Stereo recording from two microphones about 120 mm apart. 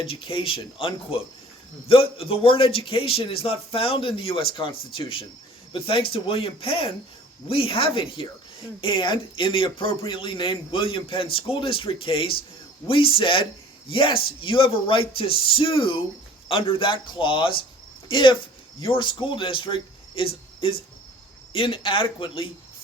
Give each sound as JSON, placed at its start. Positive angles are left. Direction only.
{"t": 0.0, "sound": "speech", "side_deg": 50}